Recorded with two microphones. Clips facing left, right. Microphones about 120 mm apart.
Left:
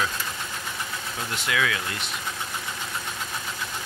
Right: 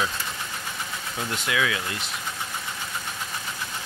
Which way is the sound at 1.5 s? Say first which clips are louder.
Even; 15° right (ahead or behind).